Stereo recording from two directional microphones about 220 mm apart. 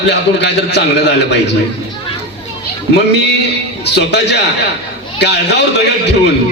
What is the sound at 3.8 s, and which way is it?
A man's voice, 50° left (ahead or behind).